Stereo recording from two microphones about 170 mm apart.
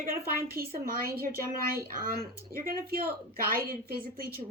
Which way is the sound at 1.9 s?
60° right (ahead or behind).